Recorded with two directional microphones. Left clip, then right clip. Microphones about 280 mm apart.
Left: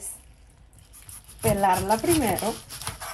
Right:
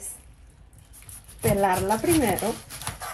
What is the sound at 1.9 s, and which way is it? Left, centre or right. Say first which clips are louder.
Speech: right 1 dB; centre.